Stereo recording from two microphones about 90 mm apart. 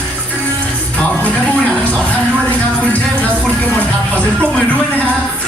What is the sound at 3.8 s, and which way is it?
Music, 20° left (ahead or behind).